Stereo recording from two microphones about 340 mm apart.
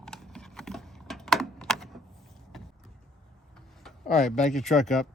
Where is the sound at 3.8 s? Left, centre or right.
Centre.